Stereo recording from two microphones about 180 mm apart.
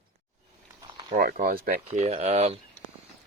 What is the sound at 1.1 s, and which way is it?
Speech, 55° right (ahead or behind).